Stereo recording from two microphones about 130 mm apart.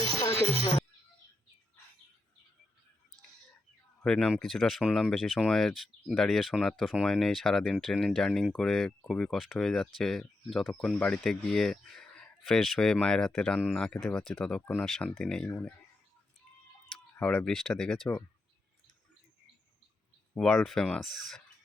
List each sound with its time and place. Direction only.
0.3 s speech: 50° right (ahead or behind)
4.0 s speech: 5° left (ahead or behind)
14.6 s speech: 15° left (ahead or behind)
14.8 s speech: centre (ahead or behind)
17.2 s speech: 10° left (ahead or behind)
20.3 s speech: 5° left (ahead or behind)